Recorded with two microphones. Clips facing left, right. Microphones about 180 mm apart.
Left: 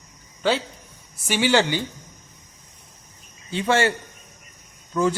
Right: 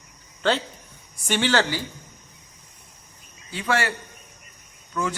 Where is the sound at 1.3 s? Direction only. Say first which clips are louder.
Left 2 dB; 10° left (ahead or behind).